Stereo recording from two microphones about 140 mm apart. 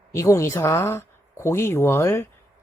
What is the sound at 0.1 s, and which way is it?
Speech, 20° left (ahead or behind).